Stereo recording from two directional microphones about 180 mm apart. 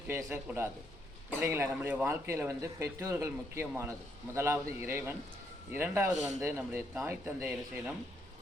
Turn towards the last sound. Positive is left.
turn(degrees=-10)  # may be behind; listen again after turning